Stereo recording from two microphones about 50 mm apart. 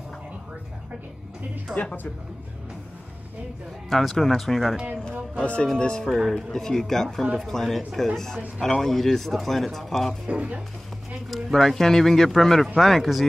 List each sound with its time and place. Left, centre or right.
1.8 s speech: left
3.9 s speech: centre
5.3 s speech: left
6.0 s speech: centre
10.2 s speech: right
11.2 s speech: centre